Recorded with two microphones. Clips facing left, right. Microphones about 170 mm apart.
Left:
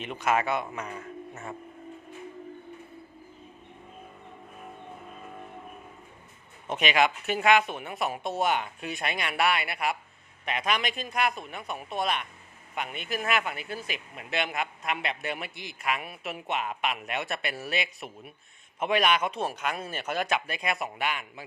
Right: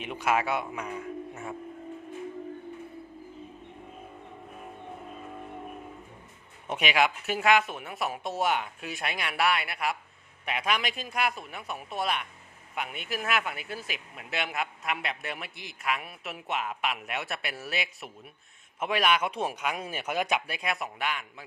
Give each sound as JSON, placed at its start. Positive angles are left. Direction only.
{"t": 0.0, "sound": "speech", "side_deg": -10}
{"t": 6.7, "sound": "speech", "side_deg": -10}